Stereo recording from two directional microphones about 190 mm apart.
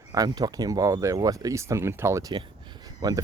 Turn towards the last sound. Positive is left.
turn(degrees=-20)  # may be behind; listen again after turning